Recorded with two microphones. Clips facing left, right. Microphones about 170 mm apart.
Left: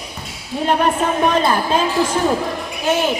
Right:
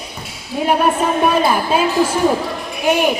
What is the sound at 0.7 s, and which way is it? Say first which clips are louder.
A woman's voice: right 1 dB; 10° right (ahead or behind).